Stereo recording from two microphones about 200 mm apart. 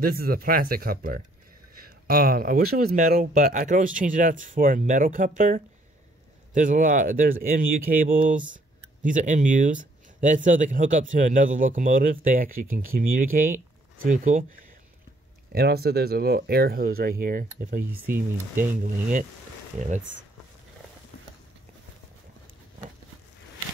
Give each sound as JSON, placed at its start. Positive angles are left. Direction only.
{"t": 0.0, "sound": "speech", "side_deg": -45}
{"t": 15.5, "sound": "speech", "side_deg": -50}